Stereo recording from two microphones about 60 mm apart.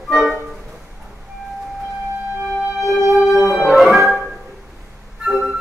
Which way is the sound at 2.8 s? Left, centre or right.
Left.